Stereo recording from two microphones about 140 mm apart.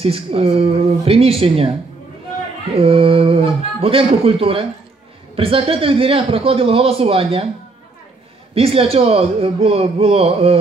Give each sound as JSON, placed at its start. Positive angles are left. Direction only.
{"t": 0.0, "sound": "a man's voice", "side_deg": -45}
{"t": 2.7, "sound": "a man's voice", "side_deg": -40}
{"t": 8.5, "sound": "a man's voice", "side_deg": -45}